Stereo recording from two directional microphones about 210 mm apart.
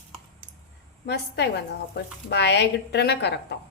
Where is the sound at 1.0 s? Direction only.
55° left (ahead or behind).